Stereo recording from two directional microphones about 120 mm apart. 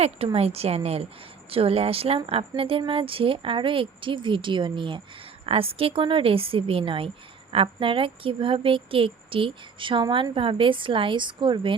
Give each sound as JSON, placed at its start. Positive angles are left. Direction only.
{"t": 0.3, "sound": "speech", "side_deg": -60}
{"t": 5.5, "sound": "speech", "side_deg": -50}